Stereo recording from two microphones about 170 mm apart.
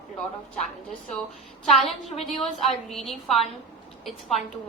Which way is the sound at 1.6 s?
Centre (ahead or behind).